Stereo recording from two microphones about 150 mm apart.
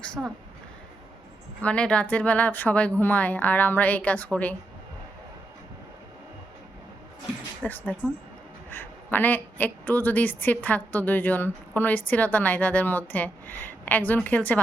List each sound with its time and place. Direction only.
0.2 s speech: 10° right (ahead or behind)
1.6 s a woman's voice: 10° left (ahead or behind)
7.6 s a woman's voice: 10° left (ahead or behind)